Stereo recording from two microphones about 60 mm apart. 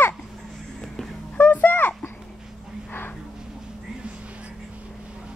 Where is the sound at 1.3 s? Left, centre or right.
Left.